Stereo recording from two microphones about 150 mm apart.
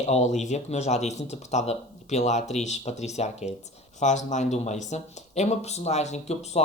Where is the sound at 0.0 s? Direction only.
50° left (ahead or behind).